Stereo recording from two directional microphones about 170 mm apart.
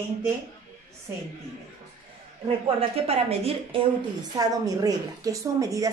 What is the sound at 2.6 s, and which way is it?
A woman's voice, 35° right (ahead or behind).